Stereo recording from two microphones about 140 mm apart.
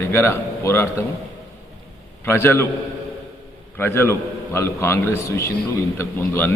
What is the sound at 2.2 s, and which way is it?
Speech, 15° left (ahead or behind).